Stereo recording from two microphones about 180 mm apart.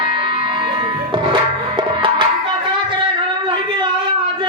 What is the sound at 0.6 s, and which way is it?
Music, 25° right (ahead or behind).